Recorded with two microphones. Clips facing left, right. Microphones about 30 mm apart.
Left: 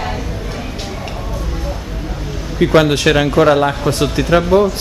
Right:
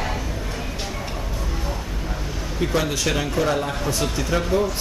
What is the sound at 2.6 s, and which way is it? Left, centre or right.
Speech, left.